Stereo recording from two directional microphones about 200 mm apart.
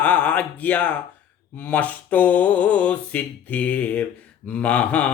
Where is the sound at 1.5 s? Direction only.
5° left (ahead or behind).